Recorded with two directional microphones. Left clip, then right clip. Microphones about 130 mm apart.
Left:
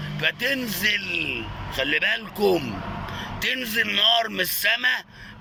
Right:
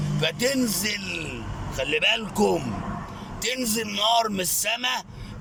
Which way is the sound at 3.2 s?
35° right (ahead or behind).